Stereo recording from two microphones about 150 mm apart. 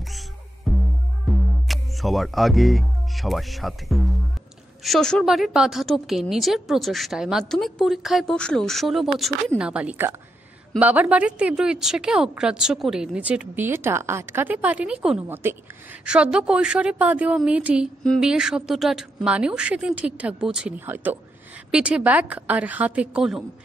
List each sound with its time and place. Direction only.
0.7 s music: centre (ahead or behind)
1.7 s a woman's voice: centre (ahead or behind)